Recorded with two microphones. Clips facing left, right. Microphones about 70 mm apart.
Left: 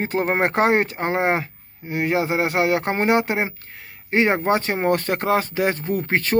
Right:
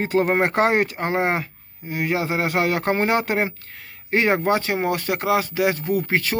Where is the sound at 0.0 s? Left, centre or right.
Left.